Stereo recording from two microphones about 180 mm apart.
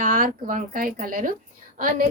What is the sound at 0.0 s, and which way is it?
Speech, 50° right (ahead or behind).